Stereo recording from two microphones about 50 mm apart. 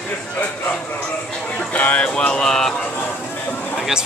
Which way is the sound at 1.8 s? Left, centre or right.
Left.